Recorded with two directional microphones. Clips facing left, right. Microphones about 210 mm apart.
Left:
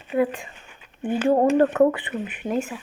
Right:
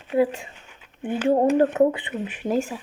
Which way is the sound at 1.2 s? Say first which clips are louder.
Even; 20° right (ahead or behind).